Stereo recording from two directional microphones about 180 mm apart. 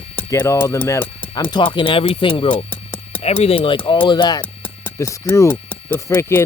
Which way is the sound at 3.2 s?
35° left (ahead or behind).